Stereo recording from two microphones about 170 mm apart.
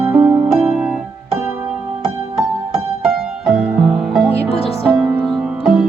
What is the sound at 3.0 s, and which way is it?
Music, 5° right (ahead or behind).